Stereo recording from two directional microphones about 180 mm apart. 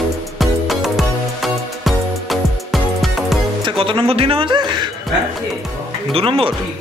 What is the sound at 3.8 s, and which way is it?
A man's voice, 30° right (ahead or behind).